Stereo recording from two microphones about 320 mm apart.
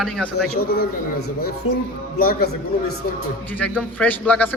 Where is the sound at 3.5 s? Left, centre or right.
Centre.